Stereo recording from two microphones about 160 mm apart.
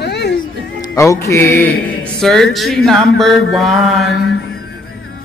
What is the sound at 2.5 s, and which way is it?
Mantra, centre (ahead or behind).